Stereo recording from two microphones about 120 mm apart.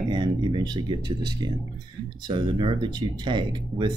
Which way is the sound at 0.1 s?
40° right (ahead or behind).